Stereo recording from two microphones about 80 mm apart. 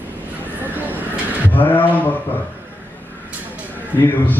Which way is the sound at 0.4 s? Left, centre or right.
Right.